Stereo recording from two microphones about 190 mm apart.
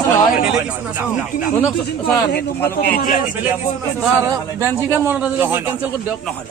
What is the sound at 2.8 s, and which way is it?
Speech, 50° left (ahead or behind).